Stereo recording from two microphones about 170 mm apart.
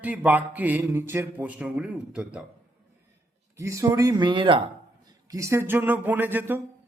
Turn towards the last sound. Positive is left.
turn(degrees=-10)  # may be behind; listen again after turning